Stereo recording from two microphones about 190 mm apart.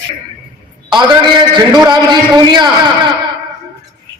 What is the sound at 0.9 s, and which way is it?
A man's voice, 25° right (ahead or behind).